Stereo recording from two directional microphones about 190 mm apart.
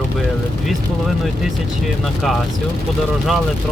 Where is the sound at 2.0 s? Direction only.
Centre (ahead or behind).